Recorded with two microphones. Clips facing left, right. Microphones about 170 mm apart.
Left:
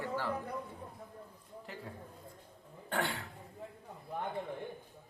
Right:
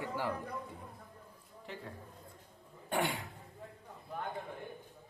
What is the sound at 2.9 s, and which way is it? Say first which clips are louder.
Speech: right 2 dB; 15° right (ahead or behind).